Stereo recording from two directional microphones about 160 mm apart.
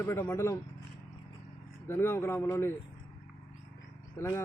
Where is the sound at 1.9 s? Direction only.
15° left (ahead or behind).